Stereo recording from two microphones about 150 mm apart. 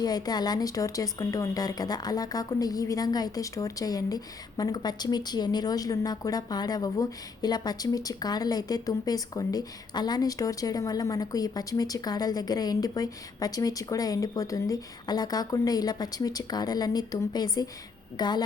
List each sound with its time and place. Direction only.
0.0 s speech: 25° left (ahead or behind)